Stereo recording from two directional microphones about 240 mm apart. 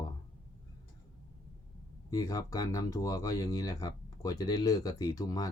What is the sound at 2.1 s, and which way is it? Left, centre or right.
Speech, centre.